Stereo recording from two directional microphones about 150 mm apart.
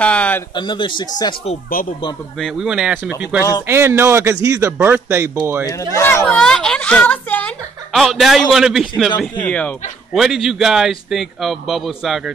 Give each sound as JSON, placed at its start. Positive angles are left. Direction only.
{"t": 0.0, "sound": "speech", "side_deg": 10}
{"t": 0.6, "sound": "speech", "side_deg": 30}
{"t": 2.4, "sound": "a man's voice", "side_deg": -5}
{"t": 5.9, "sound": "speech", "side_deg": 15}
{"t": 6.2, "sound": "a sound", "side_deg": 5}
{"t": 7.9, "sound": "a man's voice", "side_deg": 0}
{"t": 9.4, "sound": "speech", "side_deg": 10}
{"t": 10.2, "sound": "a man's voice", "side_deg": 0}